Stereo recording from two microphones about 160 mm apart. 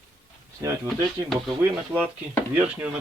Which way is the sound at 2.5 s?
10° right (ahead or behind).